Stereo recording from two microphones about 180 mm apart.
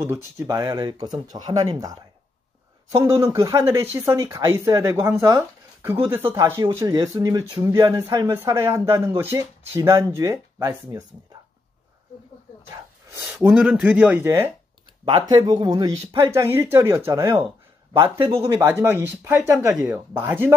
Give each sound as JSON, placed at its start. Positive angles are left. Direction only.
{"t": 0.4, "sound": "speech", "side_deg": -15}
{"t": 13.1, "sound": "speech", "side_deg": -10}
{"t": 15.0, "sound": "speech", "side_deg": -25}